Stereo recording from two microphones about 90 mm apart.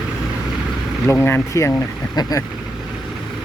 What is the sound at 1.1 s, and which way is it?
Speech, 25° left (ahead or behind).